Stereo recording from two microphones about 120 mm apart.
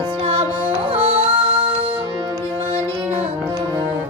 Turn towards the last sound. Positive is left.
turn(degrees=-60)  # may be behind; listen again after turning